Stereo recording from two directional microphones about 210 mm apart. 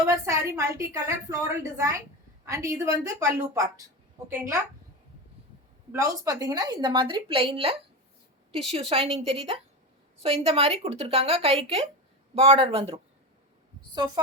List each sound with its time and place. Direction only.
0.5 s a woman's voice: 15° right (ahead or behind)
5.9 s a woman's voice: 15° right (ahead or behind)